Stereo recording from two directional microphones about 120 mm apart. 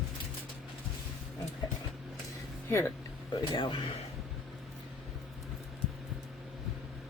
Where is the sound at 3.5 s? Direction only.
40° left (ahead or behind).